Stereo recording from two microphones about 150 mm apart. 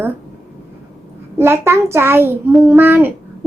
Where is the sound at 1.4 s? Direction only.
15° right (ahead or behind).